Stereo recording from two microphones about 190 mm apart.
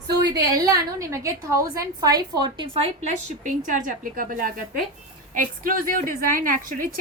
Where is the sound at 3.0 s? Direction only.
40° right (ahead or behind).